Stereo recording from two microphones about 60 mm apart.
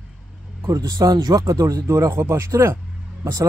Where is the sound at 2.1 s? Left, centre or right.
Right.